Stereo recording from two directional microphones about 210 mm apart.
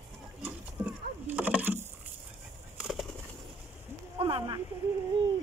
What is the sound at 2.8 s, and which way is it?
Bird, centre (ahead or behind).